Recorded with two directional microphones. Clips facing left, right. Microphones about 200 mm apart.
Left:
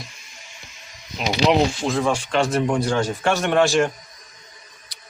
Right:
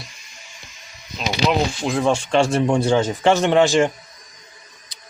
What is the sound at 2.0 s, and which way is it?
Speech, 25° right (ahead or behind).